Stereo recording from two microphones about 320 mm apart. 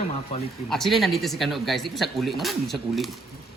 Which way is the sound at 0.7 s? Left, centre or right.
Centre.